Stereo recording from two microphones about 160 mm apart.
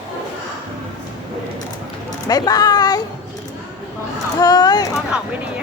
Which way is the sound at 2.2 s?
25° left (ahead or behind).